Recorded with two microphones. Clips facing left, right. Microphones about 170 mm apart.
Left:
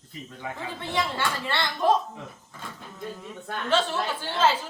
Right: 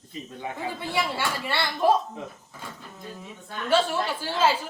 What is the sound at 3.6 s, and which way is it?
Speech, 10° right (ahead or behind).